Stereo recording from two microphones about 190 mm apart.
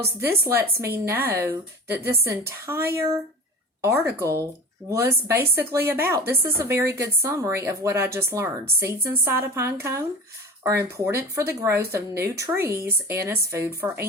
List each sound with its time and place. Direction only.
0.2 s a woman's voice: 15° right (ahead or behind)
11.0 s speech: 10° right (ahead or behind)